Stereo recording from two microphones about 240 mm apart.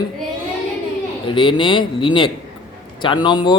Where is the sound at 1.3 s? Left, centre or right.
Left.